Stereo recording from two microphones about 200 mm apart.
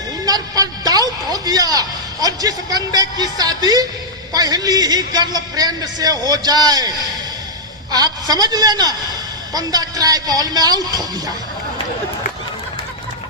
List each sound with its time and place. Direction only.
0.3 s a man's voice: 20° right (ahead or behind)